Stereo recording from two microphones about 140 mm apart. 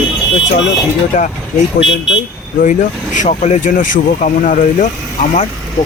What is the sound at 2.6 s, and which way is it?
Speech, 65° left (ahead or behind).